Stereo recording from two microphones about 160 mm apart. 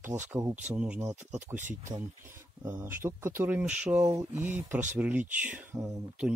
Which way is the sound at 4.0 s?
20° right (ahead or behind).